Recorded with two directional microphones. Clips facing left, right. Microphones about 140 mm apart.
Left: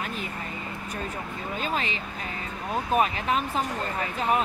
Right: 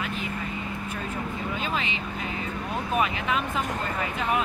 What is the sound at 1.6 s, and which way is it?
Speech, 40° left (ahead or behind).